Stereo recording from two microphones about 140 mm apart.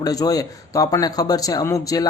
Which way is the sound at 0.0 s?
25° left (ahead or behind).